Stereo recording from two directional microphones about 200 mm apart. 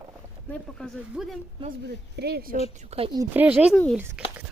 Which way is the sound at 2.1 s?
55° right (ahead or behind).